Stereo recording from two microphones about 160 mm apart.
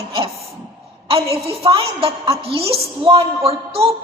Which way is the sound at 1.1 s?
35° right (ahead or behind).